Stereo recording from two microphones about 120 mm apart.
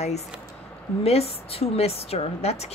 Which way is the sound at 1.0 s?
60° left (ahead or behind).